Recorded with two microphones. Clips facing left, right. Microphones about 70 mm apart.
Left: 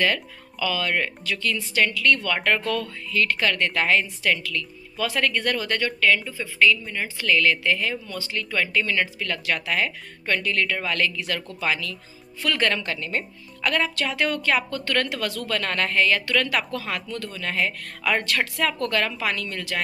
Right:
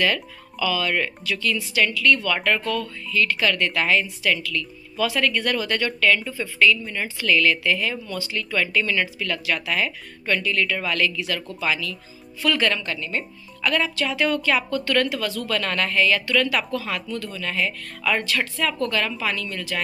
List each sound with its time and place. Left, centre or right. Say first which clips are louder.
0.0 s speech: right 1 dB; left
2.7 s speech: right 1 dB; left
3.4 s speech: right 1 dB; left
5.8 s speech: even; centre
7.2 s speech: right 1 dB; left
15.5 s speech: even; left
18.9 s speech: even; left